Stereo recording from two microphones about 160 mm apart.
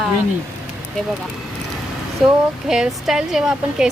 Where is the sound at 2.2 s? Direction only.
Centre (ahead or behind).